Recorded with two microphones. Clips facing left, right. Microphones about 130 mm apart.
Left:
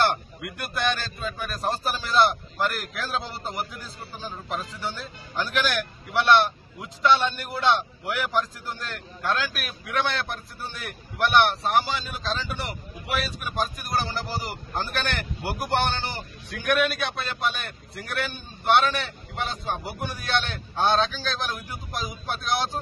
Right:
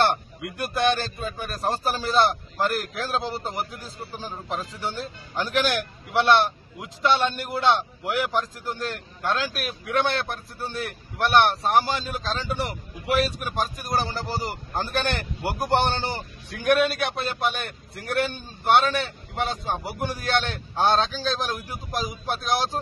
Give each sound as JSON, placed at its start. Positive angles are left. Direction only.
{"t": 0.0, "sound": "a man's voice", "side_deg": -30}
{"t": 14.0, "sound": "a man's voice", "side_deg": -35}